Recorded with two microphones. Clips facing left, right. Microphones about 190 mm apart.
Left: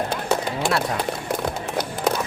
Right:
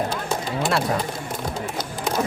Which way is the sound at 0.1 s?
65° left (ahead or behind).